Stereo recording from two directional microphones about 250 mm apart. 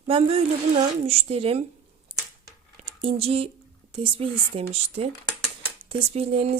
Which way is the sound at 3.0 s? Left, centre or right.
Right.